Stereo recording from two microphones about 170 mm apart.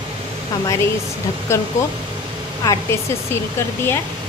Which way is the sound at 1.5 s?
15° left (ahead or behind).